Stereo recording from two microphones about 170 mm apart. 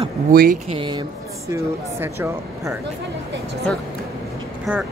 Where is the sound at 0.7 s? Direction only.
30° right (ahead or behind).